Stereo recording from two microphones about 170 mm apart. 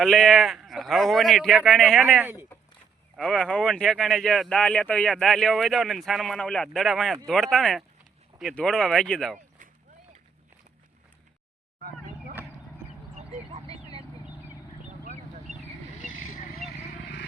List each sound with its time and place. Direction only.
0.0 s speech: centre (ahead or behind)
2.0 s speech: 10° right (ahead or behind)
3.2 s speech: 5° left (ahead or behind)
13.3 s vehicle: 35° right (ahead or behind)
16.0 s vehicle: 50° left (ahead or behind)